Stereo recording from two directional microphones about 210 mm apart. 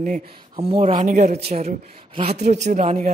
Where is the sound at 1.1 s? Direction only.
35° right (ahead or behind).